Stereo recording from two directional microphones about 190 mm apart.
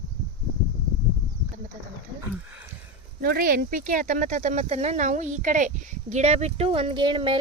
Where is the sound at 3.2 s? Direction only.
50° right (ahead or behind); by 7.4 s 25° right (ahead or behind).